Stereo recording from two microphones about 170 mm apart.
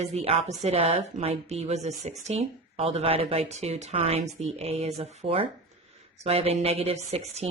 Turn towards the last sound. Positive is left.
turn(degrees=-40)  # may be behind; listen again after turning